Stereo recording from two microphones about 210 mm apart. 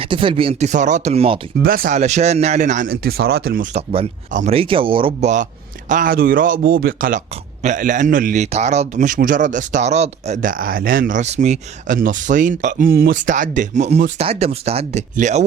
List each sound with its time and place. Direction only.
0.0 s speech: 25° right (ahead or behind)
1.6 s a man's voice: 45° right (ahead or behind)